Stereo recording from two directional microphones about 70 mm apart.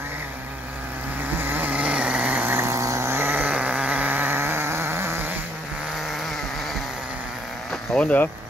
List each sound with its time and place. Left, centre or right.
1.4 s vehicle: right
2.6 s vehicle: right
3.2 s sheep: right
7.9 s speech: left